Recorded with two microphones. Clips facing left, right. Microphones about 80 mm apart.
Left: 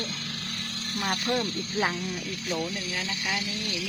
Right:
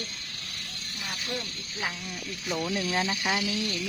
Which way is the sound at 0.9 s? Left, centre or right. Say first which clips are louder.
Left 8 dB; left.